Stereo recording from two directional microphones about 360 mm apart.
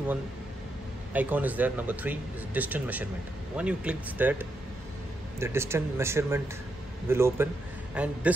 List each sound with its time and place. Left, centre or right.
1.1 s speech: centre